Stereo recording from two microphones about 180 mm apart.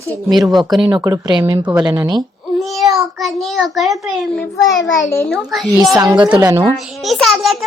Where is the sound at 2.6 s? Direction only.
Centre (ahead or behind).